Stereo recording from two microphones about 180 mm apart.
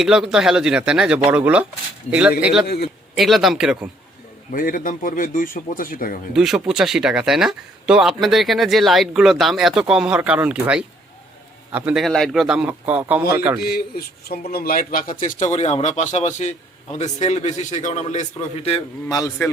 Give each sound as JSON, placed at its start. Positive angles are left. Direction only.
{"t": 0.0, "sound": "speech", "side_deg": -5}
{"t": 2.6, "sound": "a man's voice", "side_deg": 65}
{"t": 3.2, "sound": "speech", "side_deg": 0}
{"t": 4.5, "sound": "a man's voice", "side_deg": 50}
{"t": 6.3, "sound": "speech", "side_deg": -5}
{"t": 13.6, "sound": "speech", "side_deg": 60}
{"t": 19.0, "sound": "a man's voice", "side_deg": 20}